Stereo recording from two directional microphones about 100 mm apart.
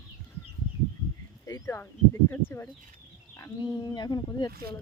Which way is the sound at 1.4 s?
30° left (ahead or behind).